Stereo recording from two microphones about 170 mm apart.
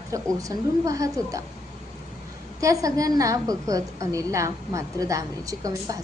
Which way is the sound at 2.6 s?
20° right (ahead or behind).